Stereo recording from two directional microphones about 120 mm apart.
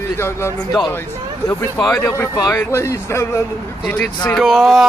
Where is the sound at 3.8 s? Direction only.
5° left (ahead or behind).